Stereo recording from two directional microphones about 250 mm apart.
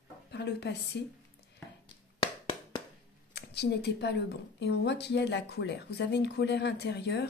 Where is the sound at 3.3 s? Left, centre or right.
Left.